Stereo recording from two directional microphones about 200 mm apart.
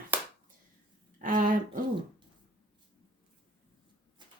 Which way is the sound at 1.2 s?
40° right (ahead or behind).